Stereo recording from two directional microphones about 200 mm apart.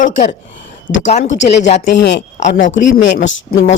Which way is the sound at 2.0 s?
60° left (ahead or behind).